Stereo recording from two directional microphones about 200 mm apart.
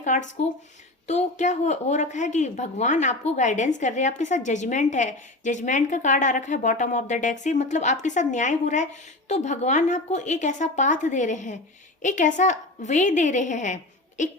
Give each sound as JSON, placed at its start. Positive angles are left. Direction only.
{"t": 0.0, "sound": "a woman's voice", "side_deg": 40}